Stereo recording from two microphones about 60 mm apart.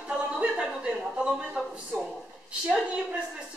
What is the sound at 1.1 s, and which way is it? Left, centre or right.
Speech, centre.